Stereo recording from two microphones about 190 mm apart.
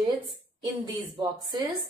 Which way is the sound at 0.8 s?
20° right (ahead or behind).